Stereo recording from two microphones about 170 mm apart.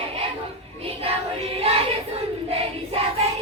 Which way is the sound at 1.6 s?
35° right (ahead or behind).